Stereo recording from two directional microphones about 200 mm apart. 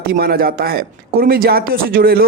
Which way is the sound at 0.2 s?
50° right (ahead or behind).